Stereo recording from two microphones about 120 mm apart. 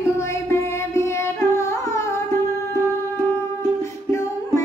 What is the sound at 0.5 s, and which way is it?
Carnatic music, 25° left (ahead or behind).